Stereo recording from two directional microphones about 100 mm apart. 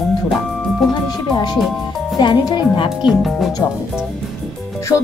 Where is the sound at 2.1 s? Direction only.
45° left (ahead or behind).